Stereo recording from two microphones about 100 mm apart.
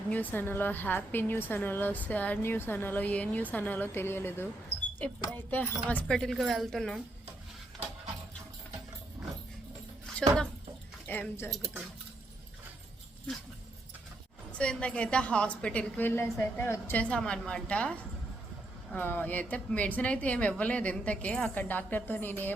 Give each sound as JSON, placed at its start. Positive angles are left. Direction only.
{"t": 0.1, "sound": "a woman's voice", "side_deg": 15}
{"t": 6.3, "sound": "speech", "side_deg": 0}
{"t": 10.2, "sound": "speech", "side_deg": 10}
{"t": 11.0, "sound": "speech", "side_deg": 20}
{"t": 14.6, "sound": "speech", "side_deg": 10}